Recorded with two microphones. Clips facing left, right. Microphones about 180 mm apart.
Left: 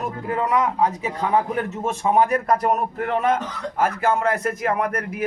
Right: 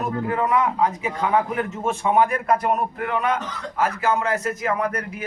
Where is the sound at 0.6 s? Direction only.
35° left (ahead or behind).